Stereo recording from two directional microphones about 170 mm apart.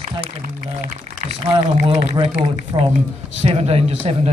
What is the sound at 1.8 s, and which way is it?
Speech, 40° right (ahead or behind).